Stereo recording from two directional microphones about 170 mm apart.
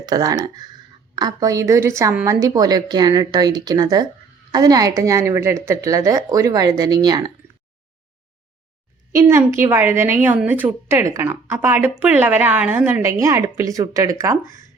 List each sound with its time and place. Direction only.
0.0 s speech: 20° right (ahead or behind)
9.1 s a woman's voice: 15° right (ahead or behind)